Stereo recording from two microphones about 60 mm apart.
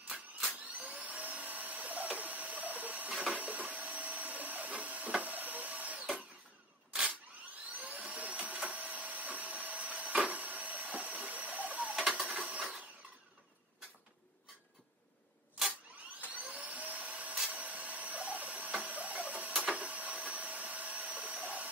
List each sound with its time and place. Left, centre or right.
0.1 s vacuum cleaner: centre
3.3 s printer: right
7.7 s vacuum cleaner: right
11.9 s a sound: centre
12.4 s a sound: right
16.3 s vacuum cleaner: right
17.5 s printer: right